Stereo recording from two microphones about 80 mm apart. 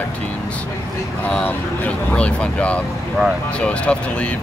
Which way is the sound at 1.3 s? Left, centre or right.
Centre.